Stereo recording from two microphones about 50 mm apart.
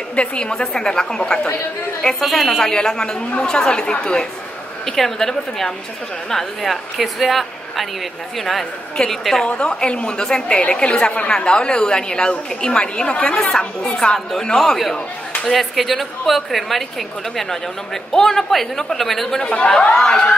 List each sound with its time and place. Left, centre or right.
0.1 s a woman's voice: left
2.1 s a woman's voice: centre
9.5 s a woman's voice: centre
15.4 s a woman's voice: centre
18.1 s a woman's voice: centre
19.4 s speech: left